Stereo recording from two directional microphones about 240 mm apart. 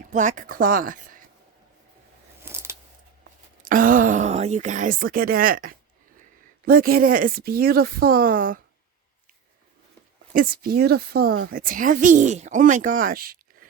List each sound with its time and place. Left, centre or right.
0.1 s speech: right
2.4 s a sound: centre
3.6 s speech: right
10.3 s speech: right